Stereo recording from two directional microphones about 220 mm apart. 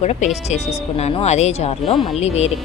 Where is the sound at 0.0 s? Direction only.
30° left (ahead or behind).